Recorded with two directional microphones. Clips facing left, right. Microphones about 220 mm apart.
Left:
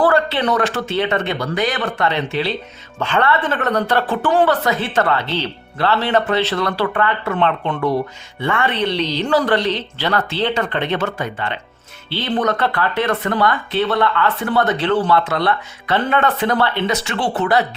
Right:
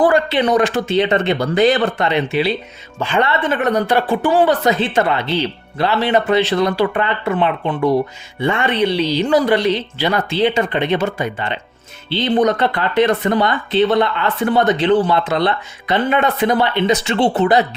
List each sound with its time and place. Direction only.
0.0 s speech: 15° right (ahead or behind)
2.0 s speech: 10° right (ahead or behind)